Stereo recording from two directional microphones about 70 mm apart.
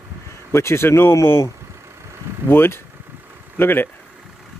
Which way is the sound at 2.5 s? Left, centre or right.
Left.